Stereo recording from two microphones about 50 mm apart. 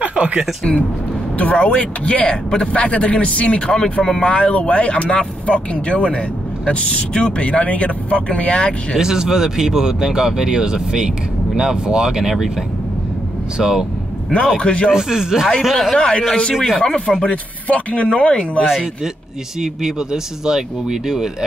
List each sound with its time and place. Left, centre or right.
0.0 s a sound: right
1.4 s speech: left
8.9 s speech: centre
13.6 s speech: centre
14.6 s speech: left
14.9 s speech: centre
15.6 s speech: centre
16.0 s speech: centre
16.5 s speech: centre
17.2 s speech: left
19.6 s speech: centre